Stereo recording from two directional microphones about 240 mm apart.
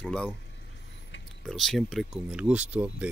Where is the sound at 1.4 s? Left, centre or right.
Centre.